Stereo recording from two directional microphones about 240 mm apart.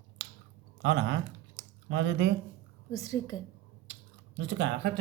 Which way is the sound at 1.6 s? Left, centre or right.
Right.